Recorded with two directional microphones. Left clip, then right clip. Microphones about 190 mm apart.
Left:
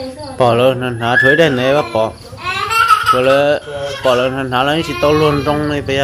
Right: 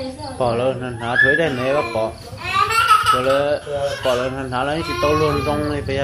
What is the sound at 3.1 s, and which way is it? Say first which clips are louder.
Speech: left 6 dB; 55° left (ahead or behind).